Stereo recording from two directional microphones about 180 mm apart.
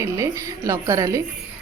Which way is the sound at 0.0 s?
15° right (ahead or behind).